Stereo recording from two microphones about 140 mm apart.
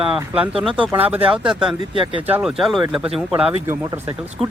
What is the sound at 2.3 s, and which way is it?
Speech, 15° right (ahead or behind).